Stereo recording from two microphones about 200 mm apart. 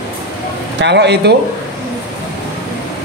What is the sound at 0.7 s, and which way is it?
Speech, 60° right (ahead or behind).